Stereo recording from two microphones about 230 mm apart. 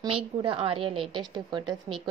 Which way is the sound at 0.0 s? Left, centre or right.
Centre.